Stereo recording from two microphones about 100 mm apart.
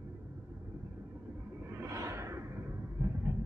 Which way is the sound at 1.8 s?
30° right (ahead or behind).